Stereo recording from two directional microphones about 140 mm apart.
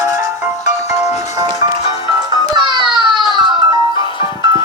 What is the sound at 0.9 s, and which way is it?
Music, 50° left (ahead or behind).